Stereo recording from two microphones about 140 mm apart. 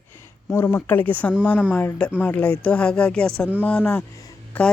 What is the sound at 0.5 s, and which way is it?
Speech, 15° left (ahead or behind).